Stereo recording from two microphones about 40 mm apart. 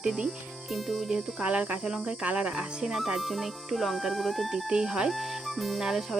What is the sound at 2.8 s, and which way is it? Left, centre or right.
Speech, centre.